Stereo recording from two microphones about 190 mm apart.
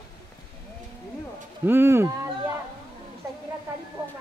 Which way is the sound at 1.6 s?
10° right (ahead or behind).